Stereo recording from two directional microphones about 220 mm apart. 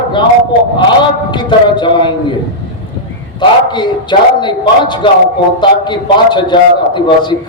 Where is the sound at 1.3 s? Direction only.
20° left (ahead or behind).